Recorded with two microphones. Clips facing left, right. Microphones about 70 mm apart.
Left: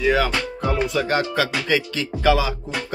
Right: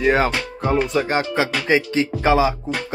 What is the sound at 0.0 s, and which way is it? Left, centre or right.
Speech, right.